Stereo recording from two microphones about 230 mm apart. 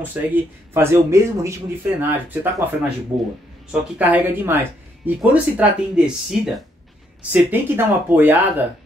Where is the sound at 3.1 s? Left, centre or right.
Right.